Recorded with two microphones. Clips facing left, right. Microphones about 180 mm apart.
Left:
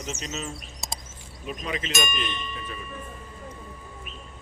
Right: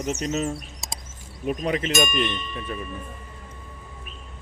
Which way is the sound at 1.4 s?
55° right (ahead or behind).